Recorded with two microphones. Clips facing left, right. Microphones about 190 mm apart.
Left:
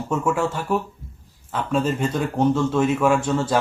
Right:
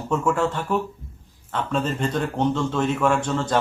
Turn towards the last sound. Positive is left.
turn(degrees=10)  # may be behind; listen again after turning